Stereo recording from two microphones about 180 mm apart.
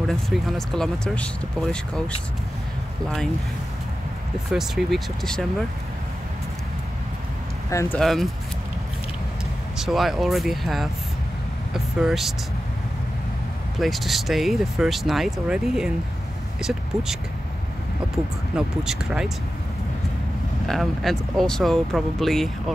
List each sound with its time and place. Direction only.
0.1 s speech: centre (ahead or behind)
4.5 s speech: centre (ahead or behind)
7.7 s speech: 15° left (ahead or behind)
8.0 s speech: centre (ahead or behind)
9.8 s speech: centre (ahead or behind)
13.7 s speech: centre (ahead or behind)
18.9 s speech: 5° right (ahead or behind)
20.6 s speech: centre (ahead or behind)